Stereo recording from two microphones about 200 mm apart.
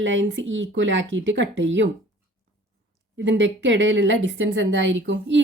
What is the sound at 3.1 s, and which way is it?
Speech, 65° right (ahead or behind).